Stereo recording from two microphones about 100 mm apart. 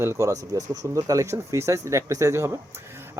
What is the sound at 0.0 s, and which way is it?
Speech, 30° right (ahead or behind).